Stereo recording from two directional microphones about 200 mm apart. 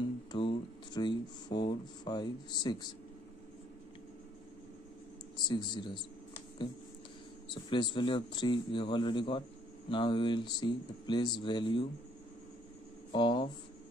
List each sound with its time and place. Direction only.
0.3 s speech: 25° left (ahead or behind)
5.5 s speech: 20° left (ahead or behind)
7.5 s speech: 25° left (ahead or behind)
13.1 s speech: 25° left (ahead or behind)